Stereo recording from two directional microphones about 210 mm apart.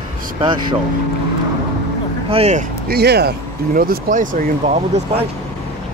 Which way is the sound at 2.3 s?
30° right (ahead or behind).